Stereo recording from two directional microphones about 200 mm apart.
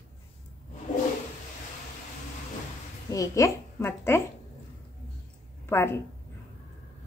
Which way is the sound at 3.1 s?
15° left (ahead or behind).